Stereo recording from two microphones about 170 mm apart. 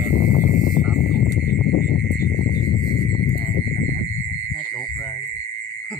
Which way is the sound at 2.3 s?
25° left (ahead or behind).